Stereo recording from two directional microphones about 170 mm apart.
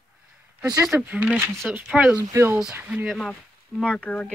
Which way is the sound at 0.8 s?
5° right (ahead or behind).